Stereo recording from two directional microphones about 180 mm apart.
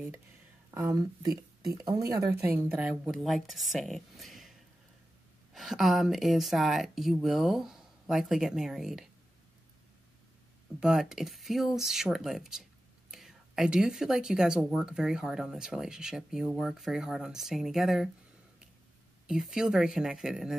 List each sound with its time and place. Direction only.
0.7 s speech: 20° right (ahead or behind); by 9.1 s centre (ahead or behind)
10.8 s speech: 5° right (ahead or behind)
19.2 s speech: 5° right (ahead or behind)